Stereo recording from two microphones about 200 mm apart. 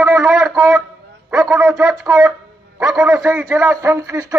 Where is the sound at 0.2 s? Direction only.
Centre (ahead or behind).